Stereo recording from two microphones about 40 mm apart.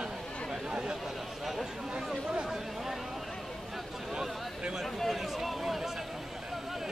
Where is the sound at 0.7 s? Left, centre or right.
Centre.